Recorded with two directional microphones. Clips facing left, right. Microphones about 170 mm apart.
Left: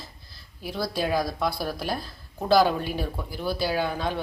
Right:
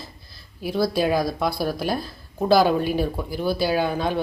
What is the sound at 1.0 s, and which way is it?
Speech, 10° right (ahead or behind).